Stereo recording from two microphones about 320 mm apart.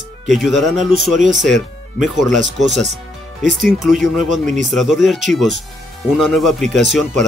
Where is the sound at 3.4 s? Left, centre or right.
Left.